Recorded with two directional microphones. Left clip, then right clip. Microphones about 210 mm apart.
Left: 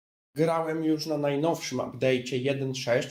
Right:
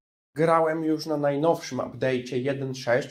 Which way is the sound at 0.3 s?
10° right (ahead or behind).